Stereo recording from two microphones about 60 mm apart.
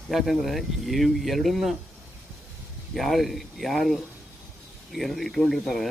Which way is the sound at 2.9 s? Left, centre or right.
Centre.